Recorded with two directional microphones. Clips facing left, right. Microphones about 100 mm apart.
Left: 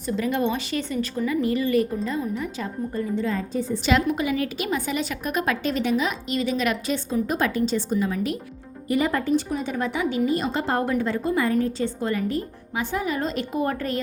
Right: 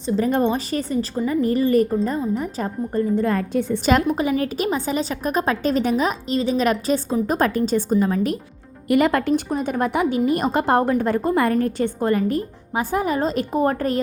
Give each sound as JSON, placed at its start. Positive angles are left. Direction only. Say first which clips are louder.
{"t": 0.3, "sound": "a woman's voice", "louder": "right 2 dB", "side_deg": -40}
{"t": 3.2, "sound": "speech", "louder": "right 5 dB", "side_deg": -65}
{"t": 3.8, "sound": "a woman's voice", "louder": "right 3 dB", "side_deg": -40}
{"t": 8.9, "sound": "speech", "louder": "right 4 dB", "side_deg": -75}
{"t": 9.6, "sound": "a woman's voice", "louder": "right 5 dB", "side_deg": -50}